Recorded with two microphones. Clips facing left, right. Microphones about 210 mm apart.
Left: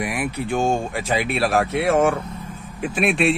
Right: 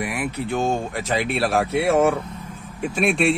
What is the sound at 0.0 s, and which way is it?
A man's voice, 15° left (ahead or behind).